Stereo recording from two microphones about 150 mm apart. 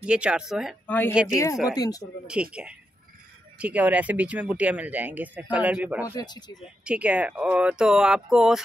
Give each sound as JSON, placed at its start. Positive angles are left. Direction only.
{"t": 0.0, "sound": "speech", "side_deg": -5}
{"t": 0.8, "sound": "a woman's voice", "side_deg": 10}
{"t": 2.2, "sound": "speech", "side_deg": -5}
{"t": 6.0, "sound": "speech", "side_deg": 25}
{"t": 6.6, "sound": "speech", "side_deg": -5}